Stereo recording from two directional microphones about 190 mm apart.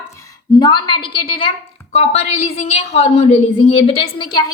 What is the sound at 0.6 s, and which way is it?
A woman's voice, 25° left (ahead or behind).